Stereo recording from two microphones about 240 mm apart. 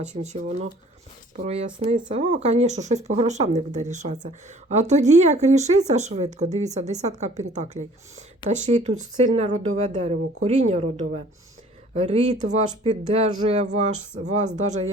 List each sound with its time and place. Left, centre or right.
0.1 s speech: right
1.5 s speech: right
11.9 s speech: right